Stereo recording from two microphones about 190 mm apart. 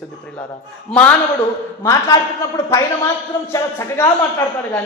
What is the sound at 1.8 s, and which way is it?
Speech, 15° left (ahead or behind).